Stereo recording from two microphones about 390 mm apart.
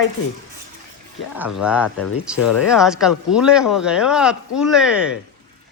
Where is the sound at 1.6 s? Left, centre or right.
Centre.